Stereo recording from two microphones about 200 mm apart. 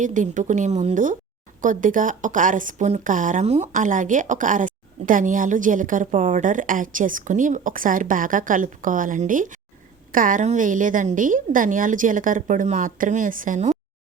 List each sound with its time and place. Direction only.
0.0 s a woman's voice: 40° right (ahead or behind)